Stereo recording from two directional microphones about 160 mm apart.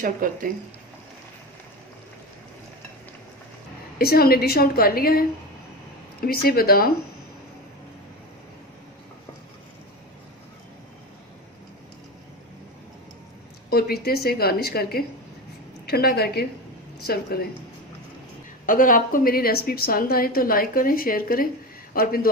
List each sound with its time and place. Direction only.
0.0 s speech: 60° right (ahead or behind)
3.9 s a woman's voice: 75° left (ahead or behind)
13.7 s a woman's voice: 75° left (ahead or behind)
18.6 s a woman's voice: 60° left (ahead or behind)